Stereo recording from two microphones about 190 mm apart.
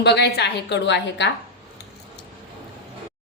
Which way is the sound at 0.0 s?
60° left (ahead or behind).